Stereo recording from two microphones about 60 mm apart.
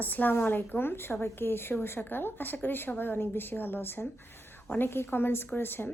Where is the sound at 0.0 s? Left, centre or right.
Left.